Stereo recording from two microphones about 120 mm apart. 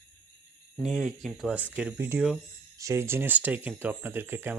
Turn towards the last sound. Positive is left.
turn(degrees=-20)  # may be behind; listen again after turning